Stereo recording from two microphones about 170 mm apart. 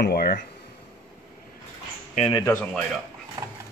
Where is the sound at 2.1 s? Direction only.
30° left (ahead or behind).